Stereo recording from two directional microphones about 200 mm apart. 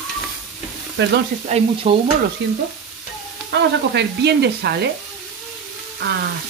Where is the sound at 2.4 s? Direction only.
60° right (ahead or behind).